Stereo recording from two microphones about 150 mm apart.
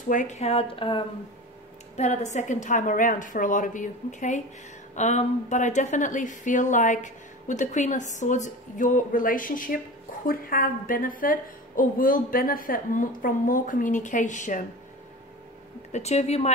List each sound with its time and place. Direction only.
0.1 s speech: 55° left (ahead or behind); by 1.0 s 35° left (ahead or behind)
2.0 s a woman's voice: 50° left (ahead or behind)
15.9 s speech: 45° left (ahead or behind)